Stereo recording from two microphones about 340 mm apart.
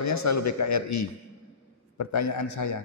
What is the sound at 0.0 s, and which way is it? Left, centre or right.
A man's voice, left.